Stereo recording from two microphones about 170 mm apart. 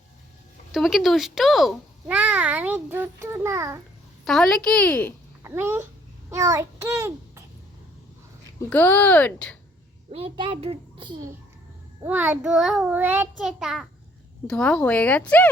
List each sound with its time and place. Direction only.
0.7 s a child's voice: centre (ahead or behind)
4.3 s speech: centre (ahead or behind)
5.4 s babbling: 15° right (ahead or behind)
6.3 s a child's voice: 20° right (ahead or behind)
8.7 s speech: 10° left (ahead or behind)
10.1 s a child's voice: 35° right (ahead or behind)
12.0 s a child's voice: 10° right (ahead or behind); by 15.4 s 10° left (ahead or behind)